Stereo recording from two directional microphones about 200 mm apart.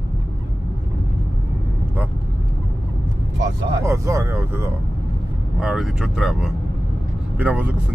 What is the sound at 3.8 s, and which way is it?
Speech, 15° right (ahead or behind).